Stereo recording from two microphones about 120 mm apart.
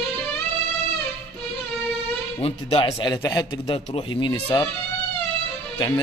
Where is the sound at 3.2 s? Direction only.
25° left (ahead or behind).